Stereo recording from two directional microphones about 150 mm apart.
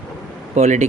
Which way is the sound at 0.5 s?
50° right (ahead or behind).